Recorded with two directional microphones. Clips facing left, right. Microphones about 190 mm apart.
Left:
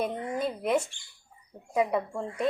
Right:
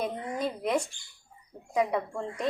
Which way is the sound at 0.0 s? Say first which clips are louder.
Left 1 dB; 5° left (ahead or behind).